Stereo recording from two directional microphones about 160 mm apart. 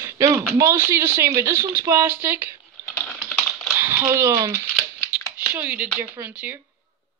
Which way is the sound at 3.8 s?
10° right (ahead or behind).